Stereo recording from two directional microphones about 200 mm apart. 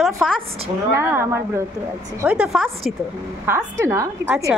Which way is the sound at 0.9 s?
15° right (ahead or behind).